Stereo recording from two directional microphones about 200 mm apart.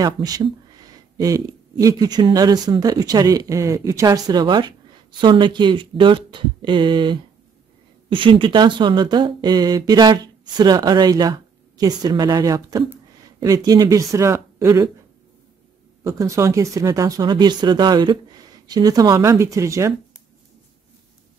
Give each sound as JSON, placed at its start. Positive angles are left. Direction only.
{"t": 0.0, "sound": "speech", "side_deg": -20}
{"t": 16.0, "sound": "speech", "side_deg": -15}